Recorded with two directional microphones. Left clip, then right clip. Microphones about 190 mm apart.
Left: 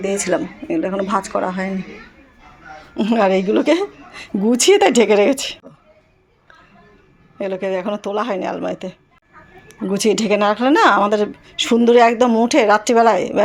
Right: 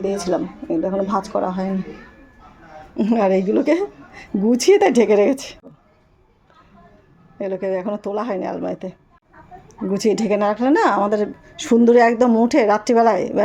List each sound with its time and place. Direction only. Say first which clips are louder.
0.0 s speech: left 2 dB; 5° left (ahead or behind)
1.0 s speech: left 2 dB; 25° left (ahead or behind)
2.9 s a woman's voice: left 2 dB; 5° right (ahead or behind)
7.3 s a woman's voice: left 1 dB; centre (ahead or behind)